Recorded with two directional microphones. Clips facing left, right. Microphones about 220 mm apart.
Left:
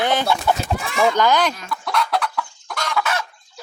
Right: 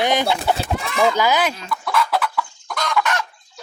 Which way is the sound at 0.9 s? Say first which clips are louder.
Left 1 dB; 5° right (ahead or behind).